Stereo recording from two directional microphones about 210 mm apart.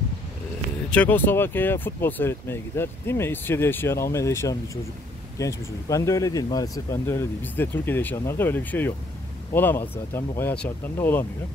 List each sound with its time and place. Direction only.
0.8 s speech: 5° left (ahead or behind)